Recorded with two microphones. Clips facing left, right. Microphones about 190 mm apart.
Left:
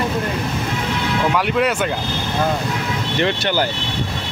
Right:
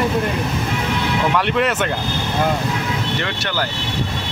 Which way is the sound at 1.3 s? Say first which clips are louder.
Even; 5° left (ahead or behind).